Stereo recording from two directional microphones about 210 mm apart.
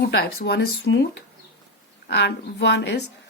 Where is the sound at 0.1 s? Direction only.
50° left (ahead or behind).